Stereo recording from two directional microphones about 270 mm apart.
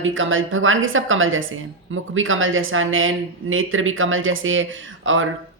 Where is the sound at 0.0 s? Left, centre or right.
Right.